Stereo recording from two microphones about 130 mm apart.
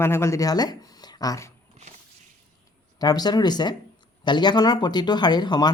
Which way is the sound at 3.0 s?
30° left (ahead or behind).